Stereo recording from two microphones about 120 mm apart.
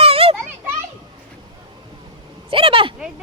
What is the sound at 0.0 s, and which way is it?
Children playing, 55° right (ahead or behind).